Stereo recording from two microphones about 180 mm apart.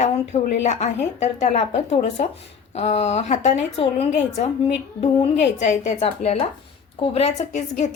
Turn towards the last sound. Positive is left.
turn(degrees=40)  # may be behind; listen again after turning